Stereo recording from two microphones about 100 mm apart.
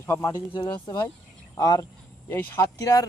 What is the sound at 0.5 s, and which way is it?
Speech, 50° left (ahead or behind).